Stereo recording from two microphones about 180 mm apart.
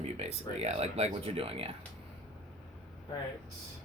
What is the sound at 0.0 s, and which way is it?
Speech, 35° right (ahead or behind).